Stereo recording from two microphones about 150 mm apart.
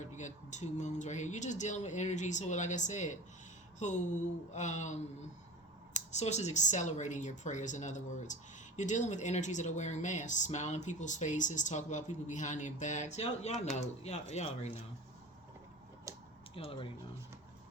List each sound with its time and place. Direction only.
0.0 s speech: 55° left (ahead or behind)
16.6 s speech: 35° left (ahead or behind)